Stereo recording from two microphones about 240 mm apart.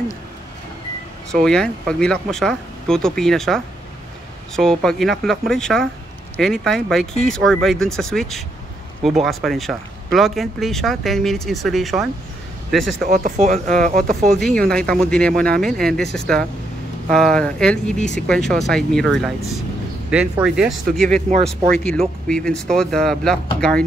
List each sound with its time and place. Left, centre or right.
1.3 s speech: centre
13.1 s speech: right
14.3 s speech: centre